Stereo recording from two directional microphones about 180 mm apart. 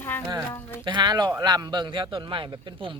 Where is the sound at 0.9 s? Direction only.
25° right (ahead or behind).